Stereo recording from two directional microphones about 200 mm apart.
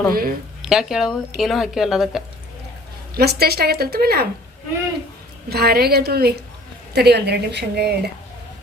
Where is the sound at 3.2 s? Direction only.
50° right (ahead or behind).